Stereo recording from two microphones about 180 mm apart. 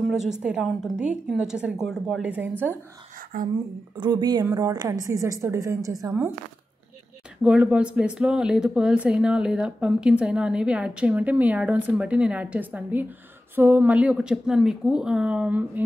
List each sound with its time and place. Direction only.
0.1 s a woman's voice: 5° right (ahead or behind)
3.3 s speech: 50° right (ahead or behind)
4.0 s a woman's voice: 25° right (ahead or behind)
7.4 s a woman's voice: 5° right (ahead or behind)